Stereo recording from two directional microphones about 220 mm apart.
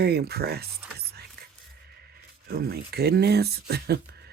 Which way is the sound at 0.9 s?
45° right (ahead or behind).